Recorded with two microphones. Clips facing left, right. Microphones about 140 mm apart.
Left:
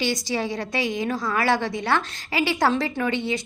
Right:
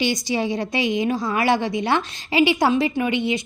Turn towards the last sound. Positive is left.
turn(degrees=-15)  # may be behind; listen again after turning